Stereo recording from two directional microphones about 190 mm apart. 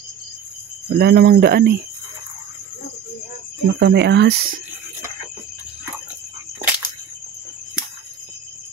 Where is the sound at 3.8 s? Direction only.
65° right (ahead or behind).